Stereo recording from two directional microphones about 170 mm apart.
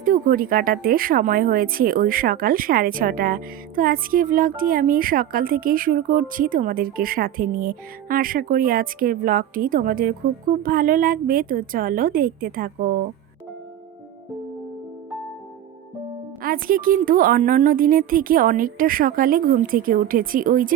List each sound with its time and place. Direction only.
0.0 s speech: 55° right (ahead or behind)
16.4 s speech: 55° right (ahead or behind)